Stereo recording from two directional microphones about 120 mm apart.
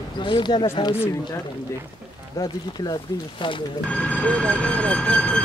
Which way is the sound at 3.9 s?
10° left (ahead or behind).